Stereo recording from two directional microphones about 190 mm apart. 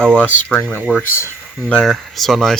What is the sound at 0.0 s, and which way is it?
Speech, 5° left (ahead or behind).